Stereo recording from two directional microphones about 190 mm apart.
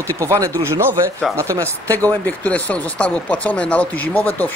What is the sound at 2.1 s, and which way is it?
Speech, 10° left (ahead or behind).